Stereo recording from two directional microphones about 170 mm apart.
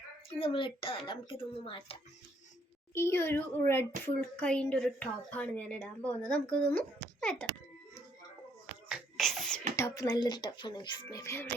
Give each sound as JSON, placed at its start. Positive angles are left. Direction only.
{"t": 0.3, "sound": "a child's voice", "side_deg": 30}
{"t": 2.9, "sound": "a child's voice", "side_deg": 15}
{"t": 8.9, "sound": "beatboxing", "side_deg": 0}
{"t": 9.7, "sound": "speech", "side_deg": 20}